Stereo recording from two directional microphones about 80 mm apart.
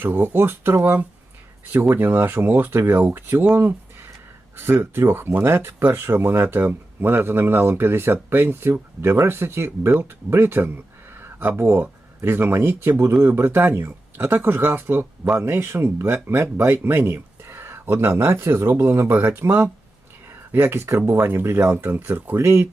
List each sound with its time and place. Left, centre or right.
0.0 s speech: right